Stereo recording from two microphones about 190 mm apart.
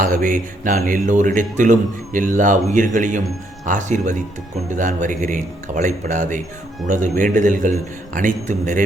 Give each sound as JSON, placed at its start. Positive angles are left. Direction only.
{"t": 0.0, "sound": "speech", "side_deg": -45}